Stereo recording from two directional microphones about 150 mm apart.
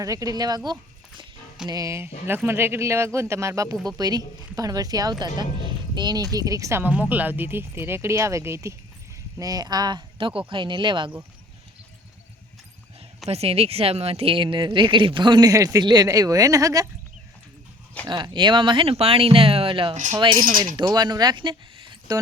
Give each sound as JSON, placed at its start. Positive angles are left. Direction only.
{"t": 0.0, "sound": "a woman's voice", "side_deg": -25}
{"t": 13.2, "sound": "a woman's voice", "side_deg": -45}
{"t": 18.1, "sound": "a woman's voice", "side_deg": -30}